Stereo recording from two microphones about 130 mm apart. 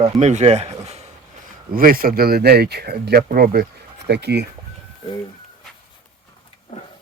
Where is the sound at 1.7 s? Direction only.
90° right.